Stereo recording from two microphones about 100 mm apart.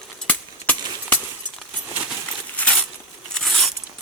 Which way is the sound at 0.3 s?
15° left (ahead or behind).